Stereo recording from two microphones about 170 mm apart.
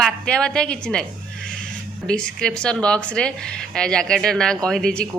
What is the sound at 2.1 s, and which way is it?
Speech, 5° left (ahead or behind).